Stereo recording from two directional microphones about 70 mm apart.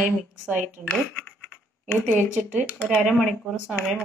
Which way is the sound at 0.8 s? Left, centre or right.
Centre.